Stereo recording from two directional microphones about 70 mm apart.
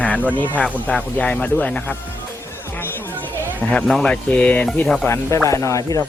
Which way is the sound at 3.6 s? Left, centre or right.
Centre.